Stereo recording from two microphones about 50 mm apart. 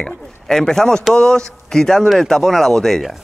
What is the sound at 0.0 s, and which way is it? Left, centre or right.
Speech, centre.